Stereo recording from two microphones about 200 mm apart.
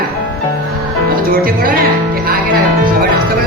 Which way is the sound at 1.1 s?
45° right (ahead or behind).